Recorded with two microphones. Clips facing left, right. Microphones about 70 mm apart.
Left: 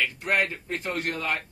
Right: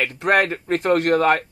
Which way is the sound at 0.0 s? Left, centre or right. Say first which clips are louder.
Right 7 dB; right.